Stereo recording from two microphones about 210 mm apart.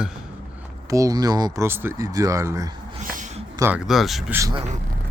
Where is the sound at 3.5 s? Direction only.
15° right (ahead or behind).